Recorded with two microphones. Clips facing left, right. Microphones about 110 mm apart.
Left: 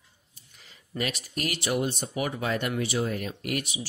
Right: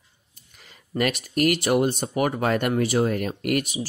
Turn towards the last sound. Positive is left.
turn(degrees=-50)  # may be behind; listen again after turning